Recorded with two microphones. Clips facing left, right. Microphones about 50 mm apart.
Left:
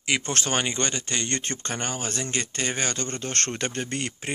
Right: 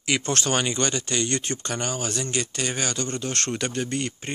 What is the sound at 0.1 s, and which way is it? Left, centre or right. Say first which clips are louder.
Speech: right 2 dB; left.